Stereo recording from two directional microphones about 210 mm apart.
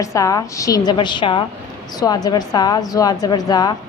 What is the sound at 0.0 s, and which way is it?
A woman's voice, 15° left (ahead or behind).